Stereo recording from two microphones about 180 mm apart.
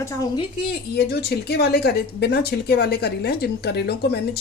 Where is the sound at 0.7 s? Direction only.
65° left (ahead or behind).